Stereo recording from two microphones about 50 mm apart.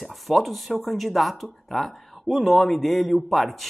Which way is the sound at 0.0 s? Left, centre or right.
Centre.